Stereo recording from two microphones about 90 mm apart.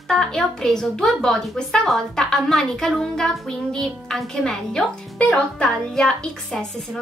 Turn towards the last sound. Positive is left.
turn(degrees=5)  # may be behind; listen again after turning